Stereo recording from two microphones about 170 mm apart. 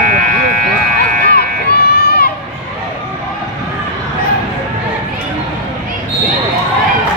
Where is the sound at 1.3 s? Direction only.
65° left (ahead or behind).